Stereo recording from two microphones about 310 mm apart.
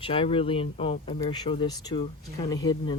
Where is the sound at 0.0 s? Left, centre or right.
Centre.